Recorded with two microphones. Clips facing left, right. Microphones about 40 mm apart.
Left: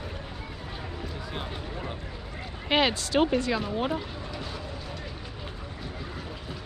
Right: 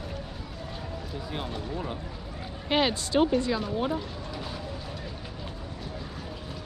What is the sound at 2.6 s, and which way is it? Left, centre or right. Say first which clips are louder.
Speech: left 1 dB; left.